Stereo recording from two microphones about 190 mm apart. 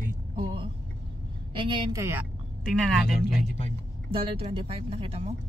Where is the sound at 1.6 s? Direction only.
15° right (ahead or behind).